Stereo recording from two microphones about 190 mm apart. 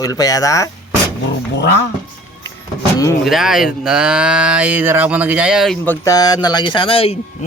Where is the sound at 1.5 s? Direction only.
65° left (ahead or behind).